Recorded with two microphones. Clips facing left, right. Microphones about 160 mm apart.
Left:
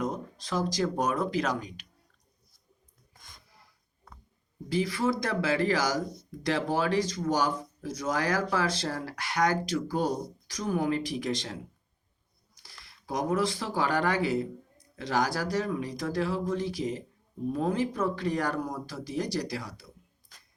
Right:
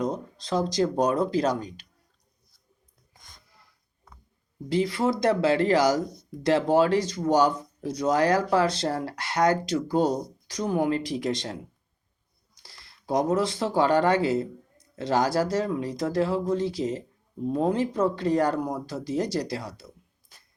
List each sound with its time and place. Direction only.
0.1 s speech: 25° right (ahead or behind)
4.7 s speech: 25° right (ahead or behind)
12.8 s speech: 25° right (ahead or behind)